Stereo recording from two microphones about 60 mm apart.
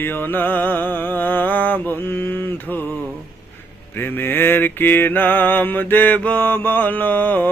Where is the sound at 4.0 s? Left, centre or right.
Left.